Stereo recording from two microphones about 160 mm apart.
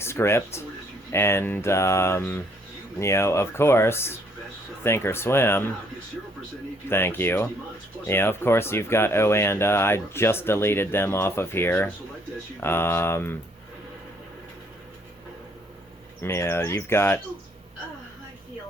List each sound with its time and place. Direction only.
0.0 s speech: 15° left (ahead or behind)
6.8 s speech: 15° left (ahead or behind)
16.2 s speech: 15° left (ahead or behind)